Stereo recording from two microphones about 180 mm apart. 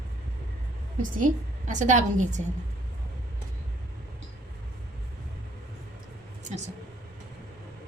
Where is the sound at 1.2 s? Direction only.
45° right (ahead or behind).